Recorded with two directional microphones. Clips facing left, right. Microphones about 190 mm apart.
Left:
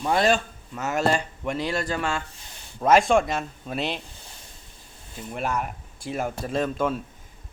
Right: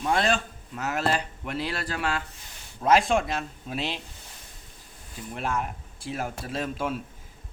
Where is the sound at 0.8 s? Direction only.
Centre (ahead or behind).